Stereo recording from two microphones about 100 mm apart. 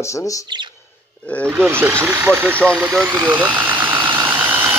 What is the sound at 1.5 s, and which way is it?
Speech, 25° right (ahead or behind).